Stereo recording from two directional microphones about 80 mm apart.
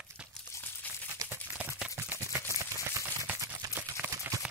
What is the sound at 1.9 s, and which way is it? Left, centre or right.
Typewriter, right.